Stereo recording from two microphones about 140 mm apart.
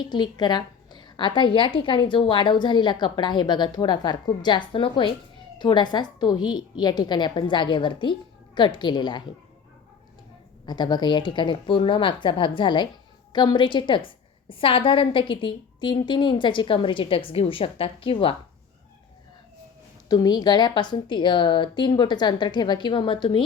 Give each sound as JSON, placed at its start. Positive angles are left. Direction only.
{"t": 0.0, "sound": "a woman's voice", "side_deg": 30}
{"t": 10.7, "sound": "a woman's voice", "side_deg": 30}
{"t": 20.1, "sound": "a woman's voice", "side_deg": 30}